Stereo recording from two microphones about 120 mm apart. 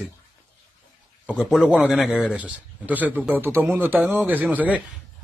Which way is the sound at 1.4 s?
Centre (ahead or behind).